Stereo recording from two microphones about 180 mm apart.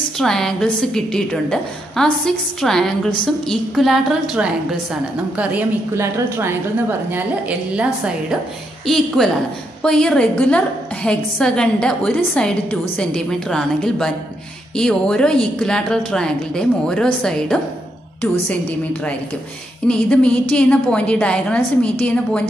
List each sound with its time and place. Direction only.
0.2 s a woman's voice: centre (ahead or behind)
19.9 s a woman's voice: 5° left (ahead or behind)